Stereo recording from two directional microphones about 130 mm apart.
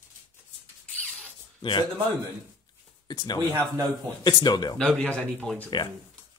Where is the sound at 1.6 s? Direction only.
40° left (ahead or behind).